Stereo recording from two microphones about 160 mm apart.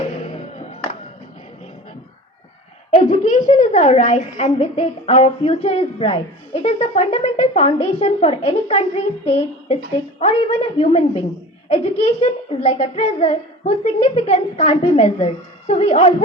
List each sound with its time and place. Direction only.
0.6 s music: 45° left (ahead or behind)
2.9 s a woman's voice: 50° left (ahead or behind)